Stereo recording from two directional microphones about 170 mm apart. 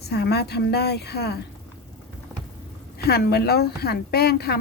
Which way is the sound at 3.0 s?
70° left (ahead or behind).